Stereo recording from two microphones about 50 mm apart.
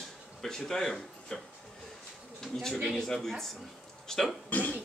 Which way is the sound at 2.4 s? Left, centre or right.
Centre.